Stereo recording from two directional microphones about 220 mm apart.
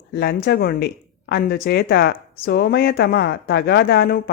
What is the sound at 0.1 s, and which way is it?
Speech, 45° left (ahead or behind).